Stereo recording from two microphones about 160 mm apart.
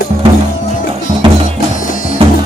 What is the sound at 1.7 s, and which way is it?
Music, 55° left (ahead or behind).